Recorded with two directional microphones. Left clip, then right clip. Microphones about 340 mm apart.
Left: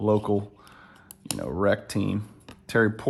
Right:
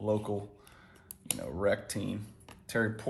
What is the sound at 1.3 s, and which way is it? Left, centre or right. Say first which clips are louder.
Speech: left 6 dB; left.